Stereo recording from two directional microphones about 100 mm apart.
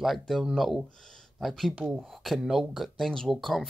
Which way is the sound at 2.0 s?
Centre (ahead or behind).